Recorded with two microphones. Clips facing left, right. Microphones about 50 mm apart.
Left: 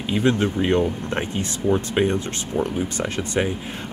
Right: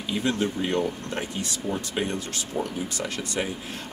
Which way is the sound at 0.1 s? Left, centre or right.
Left.